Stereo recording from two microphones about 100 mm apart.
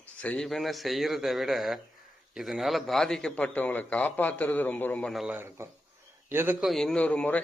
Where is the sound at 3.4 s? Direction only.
15° left (ahead or behind).